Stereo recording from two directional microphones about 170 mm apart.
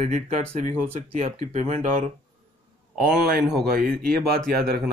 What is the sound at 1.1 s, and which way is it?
Speech, 45° right (ahead or behind).